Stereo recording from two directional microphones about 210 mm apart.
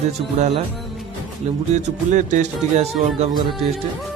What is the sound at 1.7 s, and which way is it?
Speech, 35° right (ahead or behind).